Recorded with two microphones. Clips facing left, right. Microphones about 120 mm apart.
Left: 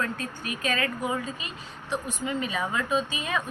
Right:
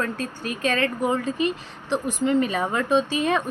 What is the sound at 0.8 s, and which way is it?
Speech, 60° right (ahead or behind).